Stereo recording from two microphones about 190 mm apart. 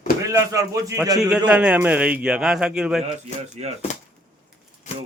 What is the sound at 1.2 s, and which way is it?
A man's voice, 5° right (ahead or behind).